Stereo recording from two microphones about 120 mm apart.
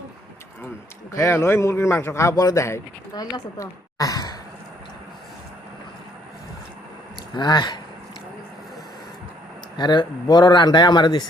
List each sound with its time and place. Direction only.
1.1 s speech: 25° left (ahead or behind)
7.3 s speech: 40° left (ahead or behind)
9.7 s speech: 40° left (ahead or behind)